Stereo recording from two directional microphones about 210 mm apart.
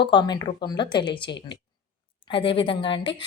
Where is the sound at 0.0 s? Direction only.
20° left (ahead or behind).